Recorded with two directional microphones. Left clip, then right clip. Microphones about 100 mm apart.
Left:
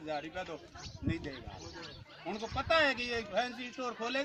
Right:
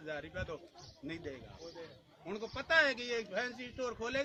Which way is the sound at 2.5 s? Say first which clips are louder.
Left 1 dB; 20° right (ahead or behind).